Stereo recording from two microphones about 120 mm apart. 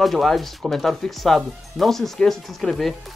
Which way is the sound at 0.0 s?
Centre (ahead or behind).